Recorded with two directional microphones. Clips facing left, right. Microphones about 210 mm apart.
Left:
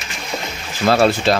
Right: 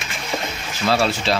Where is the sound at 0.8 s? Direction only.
50° left (ahead or behind).